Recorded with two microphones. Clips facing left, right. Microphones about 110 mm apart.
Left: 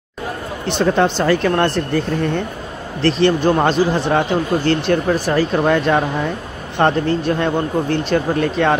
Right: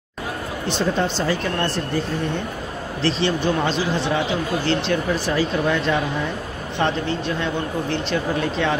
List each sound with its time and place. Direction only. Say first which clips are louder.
0.7 s speech: left 6 dB; 60° left (ahead or behind)
3.0 s speech: left 7 dB; 55° left (ahead or behind)